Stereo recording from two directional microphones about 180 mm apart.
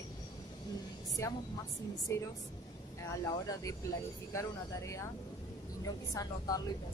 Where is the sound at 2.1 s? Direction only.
15° left (ahead or behind).